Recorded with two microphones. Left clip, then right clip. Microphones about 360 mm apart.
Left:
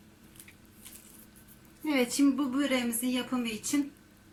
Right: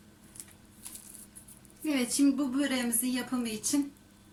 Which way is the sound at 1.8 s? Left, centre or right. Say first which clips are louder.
Left 2 dB; centre.